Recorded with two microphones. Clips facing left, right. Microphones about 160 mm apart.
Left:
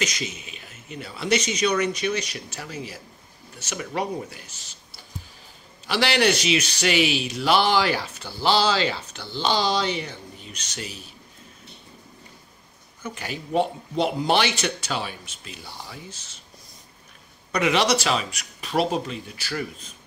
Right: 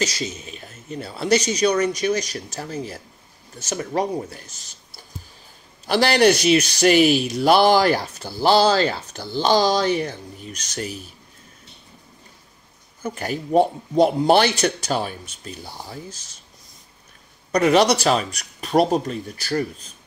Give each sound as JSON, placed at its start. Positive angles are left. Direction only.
{"t": 0.0, "sound": "speech", "side_deg": -35}
{"t": 5.9, "sound": "speech", "side_deg": -40}
{"t": 13.0, "sound": "speech", "side_deg": -45}
{"t": 17.5, "sound": "speech", "side_deg": -40}